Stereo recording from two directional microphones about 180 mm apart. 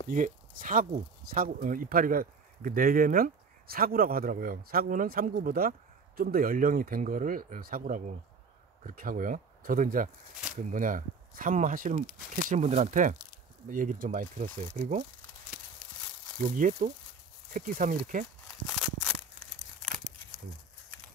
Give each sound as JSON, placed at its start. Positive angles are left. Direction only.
{"t": 0.1, "sound": "speech", "side_deg": -45}
{"t": 16.3, "sound": "speech", "side_deg": -45}
{"t": 18.5, "sound": "a sound", "side_deg": 0}